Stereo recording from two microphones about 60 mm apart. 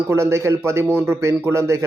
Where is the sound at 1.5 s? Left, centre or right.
Right.